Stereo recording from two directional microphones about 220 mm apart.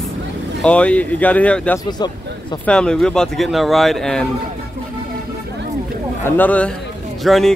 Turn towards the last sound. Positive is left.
turn(degrees=0)  # may be behind; listen again after turning